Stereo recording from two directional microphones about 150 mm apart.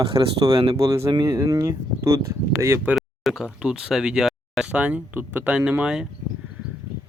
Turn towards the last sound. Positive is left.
turn(degrees=-5)  # may be behind; listen again after turning